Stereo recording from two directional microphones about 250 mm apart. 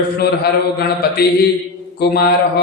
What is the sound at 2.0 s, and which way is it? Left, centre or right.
Speech, left.